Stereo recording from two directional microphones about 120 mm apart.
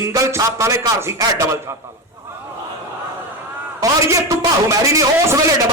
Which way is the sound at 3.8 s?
25° right (ahead or behind).